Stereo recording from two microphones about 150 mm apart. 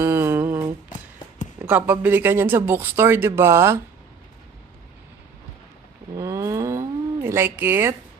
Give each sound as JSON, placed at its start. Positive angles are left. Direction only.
{"t": 0.0, "sound": "humming", "side_deg": -15}
{"t": 1.6, "sound": "speech", "side_deg": -10}
{"t": 6.1, "sound": "a sound", "side_deg": -20}